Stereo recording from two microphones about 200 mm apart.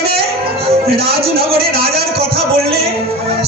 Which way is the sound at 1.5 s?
50° right (ahead or behind).